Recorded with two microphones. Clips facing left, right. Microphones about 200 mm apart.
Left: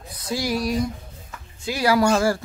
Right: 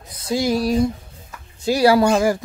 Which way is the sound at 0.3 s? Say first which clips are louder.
Right 5 dB; 25° right (ahead or behind).